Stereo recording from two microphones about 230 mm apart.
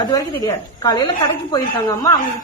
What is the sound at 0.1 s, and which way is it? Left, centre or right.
A woman's voice, centre.